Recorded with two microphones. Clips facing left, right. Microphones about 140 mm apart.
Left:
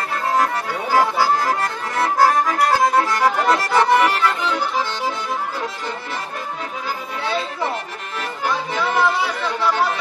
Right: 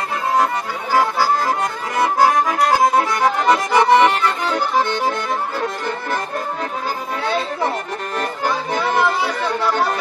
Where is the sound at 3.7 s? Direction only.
20° right (ahead or behind).